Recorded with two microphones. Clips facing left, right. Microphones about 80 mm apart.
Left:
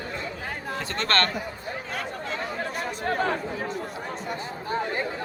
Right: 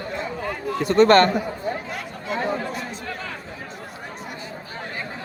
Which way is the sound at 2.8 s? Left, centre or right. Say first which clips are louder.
Left 5 dB; left.